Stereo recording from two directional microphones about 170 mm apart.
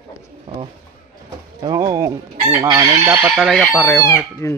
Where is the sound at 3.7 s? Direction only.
15° left (ahead or behind).